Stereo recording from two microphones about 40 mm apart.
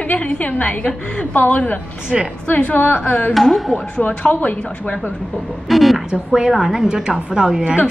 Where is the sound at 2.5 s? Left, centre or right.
Left.